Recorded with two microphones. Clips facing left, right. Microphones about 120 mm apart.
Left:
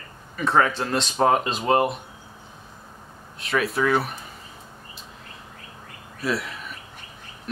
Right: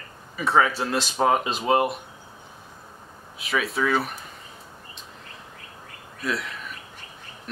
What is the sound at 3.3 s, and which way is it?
Speech, centre (ahead or behind).